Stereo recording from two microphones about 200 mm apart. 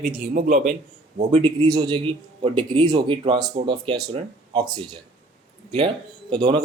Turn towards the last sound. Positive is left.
turn(degrees=-25)  # may be behind; listen again after turning